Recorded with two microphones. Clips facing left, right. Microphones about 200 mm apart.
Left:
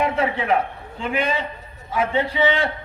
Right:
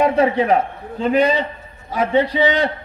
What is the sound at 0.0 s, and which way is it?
A man's voice, 40° right (ahead or behind).